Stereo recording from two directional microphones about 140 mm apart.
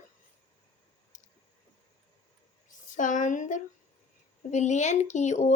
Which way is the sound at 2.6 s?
65° left (ahead or behind).